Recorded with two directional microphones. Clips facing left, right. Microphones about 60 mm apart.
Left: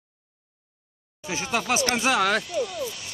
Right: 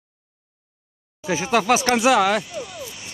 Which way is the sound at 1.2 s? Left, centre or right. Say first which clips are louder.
Right 7 dB; right.